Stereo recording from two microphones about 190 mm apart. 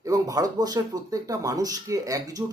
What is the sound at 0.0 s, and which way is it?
A man's voice, 20° right (ahead or behind).